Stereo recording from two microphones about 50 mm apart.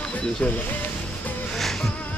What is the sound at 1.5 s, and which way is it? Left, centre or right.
Music, centre.